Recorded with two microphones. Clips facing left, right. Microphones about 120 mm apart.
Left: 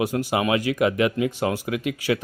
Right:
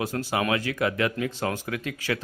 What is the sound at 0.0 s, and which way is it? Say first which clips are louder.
Speech: left 4 dB; 15° left (ahead or behind).